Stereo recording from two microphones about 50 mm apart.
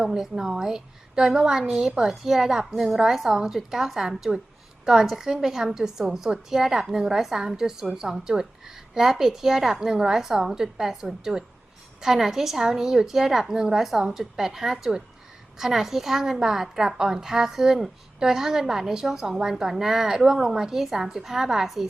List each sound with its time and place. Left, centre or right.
0.0 s a woman's voice: centre